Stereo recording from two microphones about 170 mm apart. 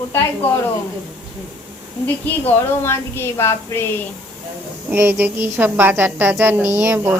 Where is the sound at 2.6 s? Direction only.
15° left (ahead or behind).